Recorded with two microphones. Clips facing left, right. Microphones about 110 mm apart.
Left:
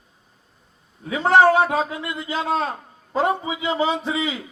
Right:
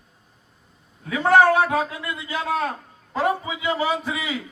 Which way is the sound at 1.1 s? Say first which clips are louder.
Left 1 dB; 25° left (ahead or behind).